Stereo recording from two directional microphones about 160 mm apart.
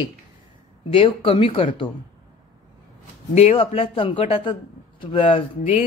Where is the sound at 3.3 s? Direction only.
35° left (ahead or behind).